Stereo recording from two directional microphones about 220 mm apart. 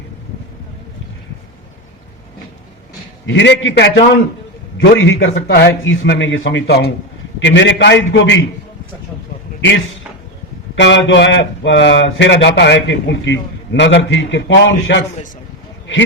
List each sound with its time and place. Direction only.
3.2 s speech: 55° left (ahead or behind)
10.8 s speech: 55° left (ahead or behind)